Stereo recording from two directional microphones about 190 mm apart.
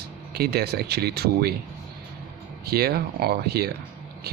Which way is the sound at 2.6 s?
55° right (ahead or behind).